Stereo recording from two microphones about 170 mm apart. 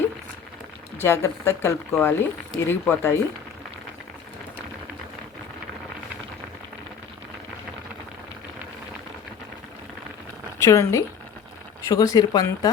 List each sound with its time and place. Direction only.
1.0 s speech: 15° left (ahead or behind)
10.6 s speech: 15° left (ahead or behind)